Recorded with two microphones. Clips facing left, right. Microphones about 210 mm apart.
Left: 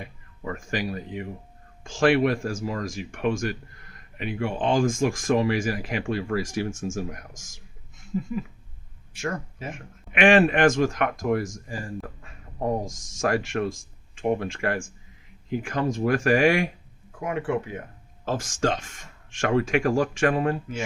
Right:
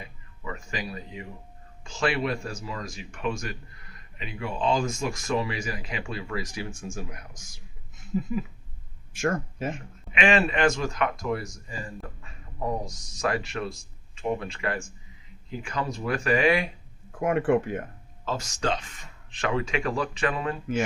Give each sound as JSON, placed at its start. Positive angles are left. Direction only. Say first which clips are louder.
{"t": 0.0, "sound": "speech", "louder": "left 4 dB", "side_deg": 50}
{"t": 8.1, "sound": "speech", "louder": "even", "side_deg": -10}
{"t": 9.1, "sound": "speech", "louder": "right 4 dB", "side_deg": -50}
{"t": 10.1, "sound": "speech", "louder": "left 5 dB", "side_deg": 50}
{"t": 17.2, "sound": "speech", "louder": "right 4 dB", "side_deg": -55}
{"t": 18.3, "sound": "speech", "louder": "left 3 dB", "side_deg": 50}